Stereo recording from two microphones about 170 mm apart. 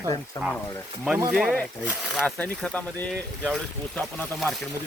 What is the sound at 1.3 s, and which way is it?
Speech, centre (ahead or behind).